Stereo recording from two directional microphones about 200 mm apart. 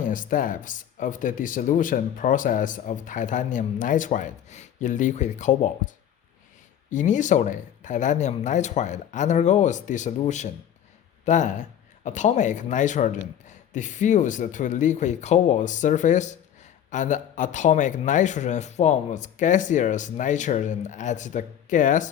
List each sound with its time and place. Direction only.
0.1 s speech: 40° left (ahead or behind)
6.9 s speech: 40° left (ahead or behind)